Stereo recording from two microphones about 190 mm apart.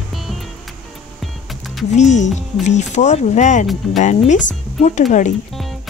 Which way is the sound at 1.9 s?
40° left (ahead or behind).